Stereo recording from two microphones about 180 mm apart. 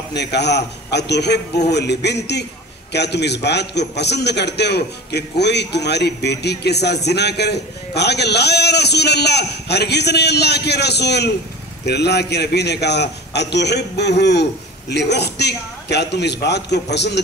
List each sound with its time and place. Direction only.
0.1 s a man's voice: 70° left (ahead or behind)